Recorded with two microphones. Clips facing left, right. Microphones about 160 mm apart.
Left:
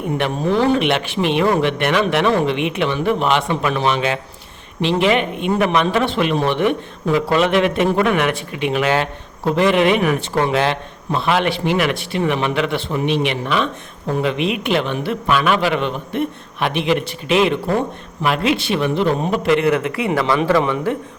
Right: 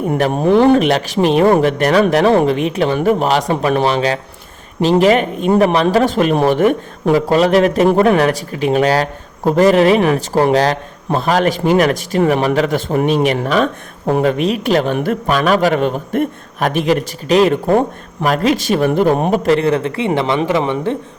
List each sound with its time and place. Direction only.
0.3 s speech: 55° right (ahead or behind)
0.9 s a man's voice: 40° right (ahead or behind)
19.3 s a man's voice: 40° right (ahead or behind); by 20.9 s 20° right (ahead or behind)